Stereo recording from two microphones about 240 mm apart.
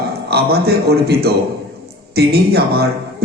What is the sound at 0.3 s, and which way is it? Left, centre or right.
A man's voice, right.